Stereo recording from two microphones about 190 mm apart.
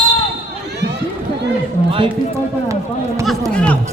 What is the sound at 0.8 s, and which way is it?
Run, 60° right (ahead or behind).